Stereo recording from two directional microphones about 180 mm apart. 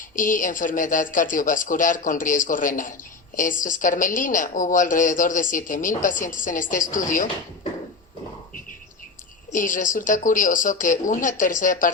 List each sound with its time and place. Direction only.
0.2 s a woman's voice: 45° left (ahead or behind)
9.5 s a woman's voice: 45° left (ahead or behind)